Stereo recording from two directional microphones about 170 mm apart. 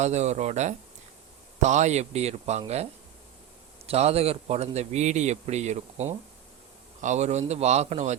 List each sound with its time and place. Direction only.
0.0 s speech: 40° right (ahead or behind)
3.8 s speech: 35° right (ahead or behind)